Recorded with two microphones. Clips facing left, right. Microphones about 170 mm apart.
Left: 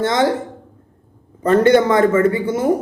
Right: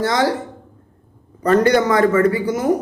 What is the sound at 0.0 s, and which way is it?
A man's voice, 25° left (ahead or behind).